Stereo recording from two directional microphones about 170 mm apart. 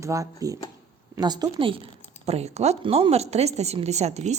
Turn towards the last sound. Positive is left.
turn(degrees=-40)  # may be behind; listen again after turning